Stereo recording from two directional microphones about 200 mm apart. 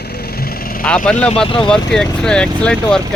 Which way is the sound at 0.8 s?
5° left (ahead or behind).